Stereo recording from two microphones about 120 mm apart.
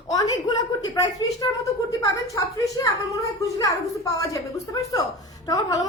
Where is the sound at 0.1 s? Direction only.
30° left (ahead or behind).